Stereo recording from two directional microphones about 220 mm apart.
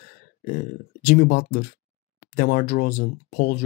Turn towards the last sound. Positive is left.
turn(degrees=45)  # may be behind; listen again after turning